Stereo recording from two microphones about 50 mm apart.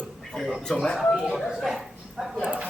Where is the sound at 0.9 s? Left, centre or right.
Centre.